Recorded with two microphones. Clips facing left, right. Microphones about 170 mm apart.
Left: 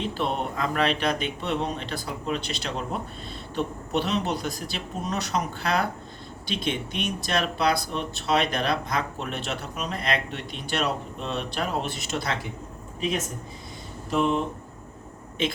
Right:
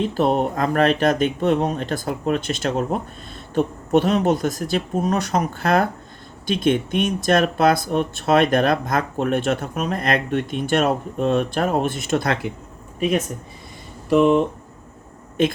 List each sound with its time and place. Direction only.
0.1 s speech: 45° right (ahead or behind)
14.1 s speech: 75° right (ahead or behind)
15.4 s speech: 50° right (ahead or behind)